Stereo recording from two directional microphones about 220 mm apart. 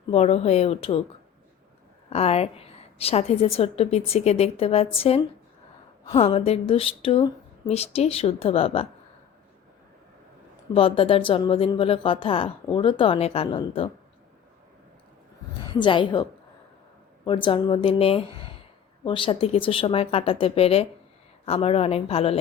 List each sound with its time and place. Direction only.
0.1 s speech: 30° left (ahead or behind)
2.0 s speech: 30° left (ahead or behind)
10.8 s speech: 25° left (ahead or behind)
15.7 s speech: 20° left (ahead or behind)
17.2 s speech: 20° left (ahead or behind)